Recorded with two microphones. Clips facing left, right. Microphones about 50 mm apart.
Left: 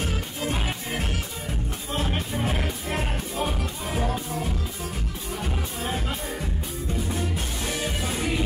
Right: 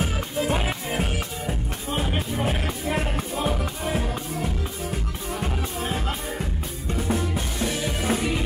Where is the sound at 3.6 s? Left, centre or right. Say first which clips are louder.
Right 2 dB; right.